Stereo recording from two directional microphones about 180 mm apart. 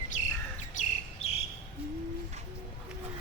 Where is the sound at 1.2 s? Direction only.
35° left (ahead or behind).